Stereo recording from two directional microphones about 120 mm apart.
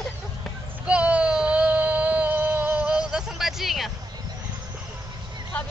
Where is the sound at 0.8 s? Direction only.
10° right (ahead or behind).